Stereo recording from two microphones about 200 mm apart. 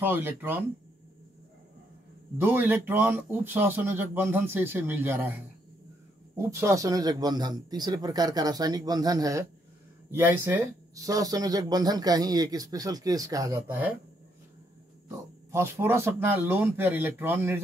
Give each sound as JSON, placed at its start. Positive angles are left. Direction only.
{"t": 0.0, "sound": "speech", "side_deg": -10}
{"t": 2.3, "sound": "speech", "side_deg": -10}
{"t": 6.3, "sound": "speech", "side_deg": -15}
{"t": 15.0, "sound": "speech", "side_deg": -15}